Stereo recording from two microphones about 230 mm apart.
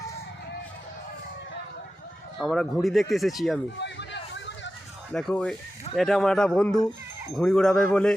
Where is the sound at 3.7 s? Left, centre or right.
Left.